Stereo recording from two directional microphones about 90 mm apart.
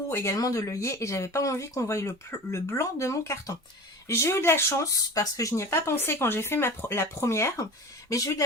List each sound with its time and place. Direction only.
0.1 s speech: 35° left (ahead or behind)
4.9 s speech: 45° left (ahead or behind)